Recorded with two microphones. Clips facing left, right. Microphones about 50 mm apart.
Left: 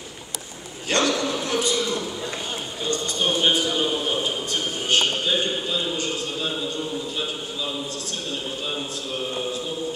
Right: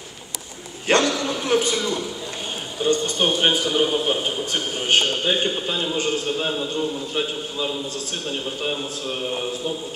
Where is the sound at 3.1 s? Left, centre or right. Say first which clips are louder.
Right 2 dB; right.